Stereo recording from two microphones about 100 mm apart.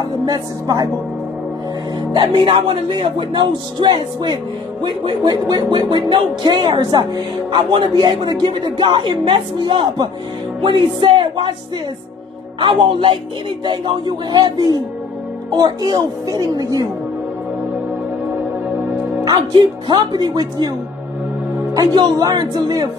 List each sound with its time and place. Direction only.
0.2 s speech: 40° right (ahead or behind)
2.1 s a man's voice: 55° right (ahead or behind)
10.6 s music: 55° right (ahead or behind)
12.5 s a man's voice: 55° right (ahead or behind); by 16.9 s 35° right (ahead or behind)
19.2 s a man's voice: 45° right (ahead or behind)
21.7 s a man's voice: 40° right (ahead or behind)